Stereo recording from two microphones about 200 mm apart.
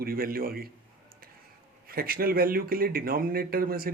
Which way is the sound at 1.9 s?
50° right (ahead or behind).